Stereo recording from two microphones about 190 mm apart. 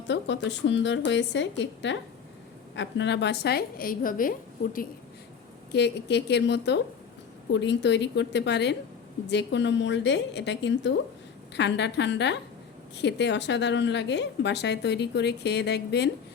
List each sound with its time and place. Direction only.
0.1 s a woman's voice: 70° left (ahead or behind); by 4.9 s 45° left (ahead or behind)
5.7 s a woman's voice: 65° left (ahead or behind)